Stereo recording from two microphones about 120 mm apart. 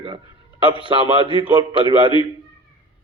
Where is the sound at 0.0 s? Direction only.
45° right (ahead or behind).